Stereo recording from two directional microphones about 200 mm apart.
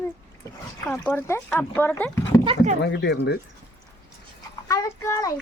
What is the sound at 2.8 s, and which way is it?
Speech, 55° left (ahead or behind).